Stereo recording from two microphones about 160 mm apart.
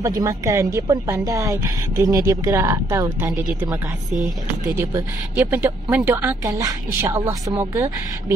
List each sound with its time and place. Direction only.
0.0 s a woman's voice: 20° right (ahead or behind)
4.7 s a woman's voice: 10° right (ahead or behind)